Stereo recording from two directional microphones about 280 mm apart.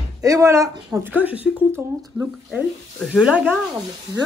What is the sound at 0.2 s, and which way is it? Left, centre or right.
Speech, centre.